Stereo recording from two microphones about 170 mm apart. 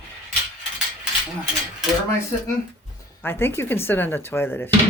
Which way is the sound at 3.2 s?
15° left (ahead or behind).